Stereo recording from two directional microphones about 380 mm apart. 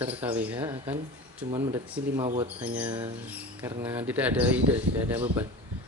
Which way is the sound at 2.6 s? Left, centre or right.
Centre.